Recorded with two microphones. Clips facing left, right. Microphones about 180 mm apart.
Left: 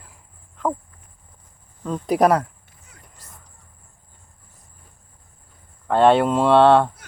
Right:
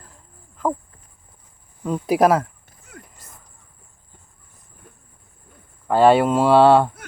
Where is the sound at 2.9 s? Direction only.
50° right (ahead or behind).